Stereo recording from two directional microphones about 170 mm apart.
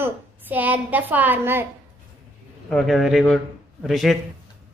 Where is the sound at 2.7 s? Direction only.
Centre (ahead or behind).